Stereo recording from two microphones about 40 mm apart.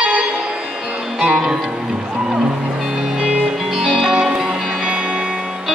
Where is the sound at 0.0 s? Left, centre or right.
Right.